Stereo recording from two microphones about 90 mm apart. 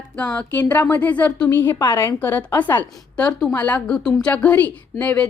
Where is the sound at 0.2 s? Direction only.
15° left (ahead or behind).